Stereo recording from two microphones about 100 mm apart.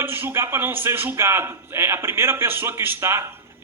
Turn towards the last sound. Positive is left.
turn(degrees=-25)  # may be behind; listen again after turning